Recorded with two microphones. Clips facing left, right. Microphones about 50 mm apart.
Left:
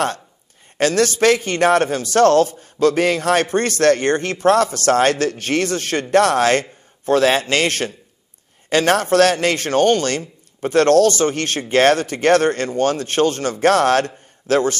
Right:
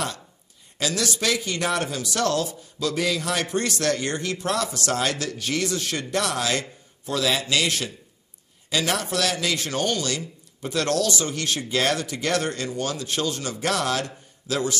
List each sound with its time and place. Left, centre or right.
0.7 s speech: left